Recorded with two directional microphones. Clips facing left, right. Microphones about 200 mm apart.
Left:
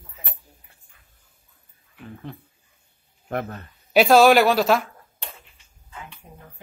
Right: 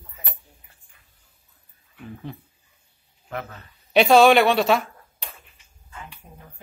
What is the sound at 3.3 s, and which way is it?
Speech, 50° left (ahead or behind).